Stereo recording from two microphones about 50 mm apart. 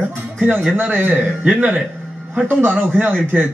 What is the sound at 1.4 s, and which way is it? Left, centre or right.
Speech, right.